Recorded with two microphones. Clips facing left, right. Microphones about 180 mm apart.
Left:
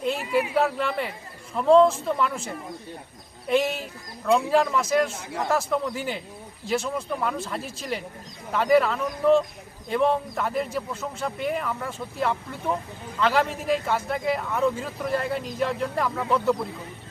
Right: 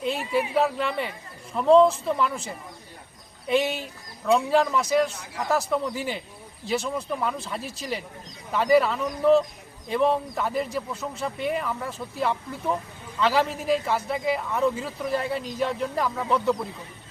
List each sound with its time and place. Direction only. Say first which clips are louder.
0.3 s speech: even; centre (ahead or behind)
5.1 s speech: left 3 dB; 25° left (ahead or behind)
5.5 s speech: right 1 dB; centre (ahead or behind)